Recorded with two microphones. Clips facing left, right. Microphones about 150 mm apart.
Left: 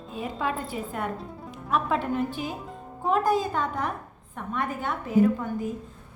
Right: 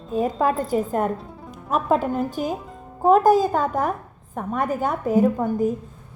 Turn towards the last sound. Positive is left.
turn(degrees=-45)  # may be behind; listen again after turning